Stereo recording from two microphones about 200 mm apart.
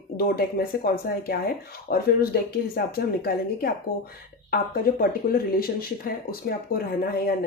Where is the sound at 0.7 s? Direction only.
50° left (ahead or behind).